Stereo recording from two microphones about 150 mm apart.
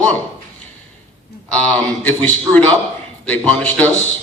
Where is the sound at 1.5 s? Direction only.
10° left (ahead or behind).